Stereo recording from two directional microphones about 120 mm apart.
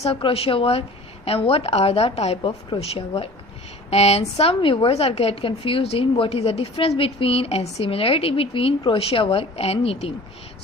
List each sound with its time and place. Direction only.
0.0 s a woman's voice: 45° left (ahead or behind)
2.7 s a woman's voice: 45° left (ahead or behind)
3.8 s a woman's voice: 60° left (ahead or behind)